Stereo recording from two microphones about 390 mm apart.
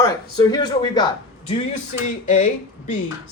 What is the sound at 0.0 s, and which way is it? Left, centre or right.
Speech, centre.